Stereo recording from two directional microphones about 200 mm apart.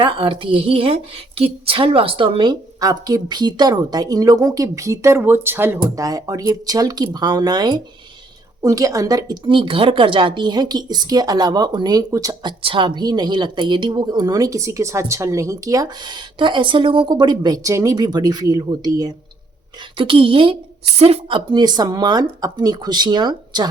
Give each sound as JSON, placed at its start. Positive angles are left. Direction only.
{"t": 0.0, "sound": "a woman's voice", "side_deg": -25}